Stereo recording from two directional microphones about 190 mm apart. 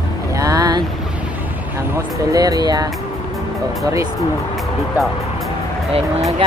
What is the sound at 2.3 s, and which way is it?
Speech, 20° right (ahead or behind).